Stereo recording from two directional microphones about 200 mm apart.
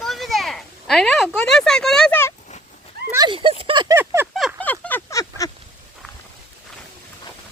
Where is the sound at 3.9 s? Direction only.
10° right (ahead or behind).